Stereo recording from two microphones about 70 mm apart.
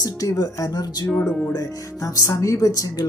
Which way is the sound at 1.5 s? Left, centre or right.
Left.